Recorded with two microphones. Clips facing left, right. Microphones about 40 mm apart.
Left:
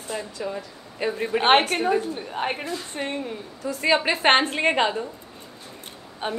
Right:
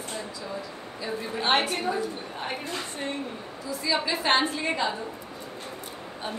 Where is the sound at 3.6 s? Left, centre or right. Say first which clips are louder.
Left 6 dB; left.